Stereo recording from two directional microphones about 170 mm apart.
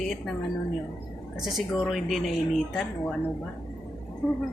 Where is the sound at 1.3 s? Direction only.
Centre (ahead or behind).